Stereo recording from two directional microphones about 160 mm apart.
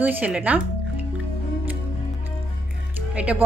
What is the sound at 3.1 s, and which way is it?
Speech, 10° right (ahead or behind).